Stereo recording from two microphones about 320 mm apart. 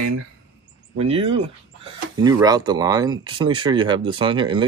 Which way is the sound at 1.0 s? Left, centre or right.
Centre.